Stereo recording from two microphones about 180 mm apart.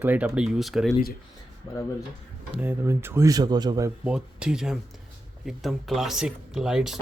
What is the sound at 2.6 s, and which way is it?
Speech, 15° right (ahead or behind).